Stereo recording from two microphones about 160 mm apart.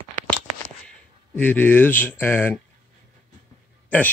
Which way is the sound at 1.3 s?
10° left (ahead or behind).